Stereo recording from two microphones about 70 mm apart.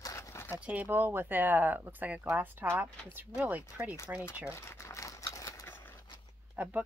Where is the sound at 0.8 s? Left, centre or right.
Right.